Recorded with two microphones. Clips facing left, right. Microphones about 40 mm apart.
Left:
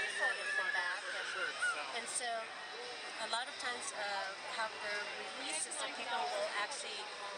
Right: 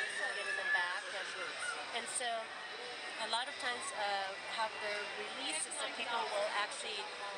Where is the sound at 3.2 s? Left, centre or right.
Right.